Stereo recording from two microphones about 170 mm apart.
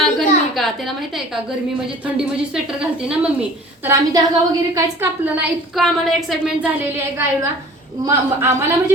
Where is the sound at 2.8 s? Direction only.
5° right (ahead or behind).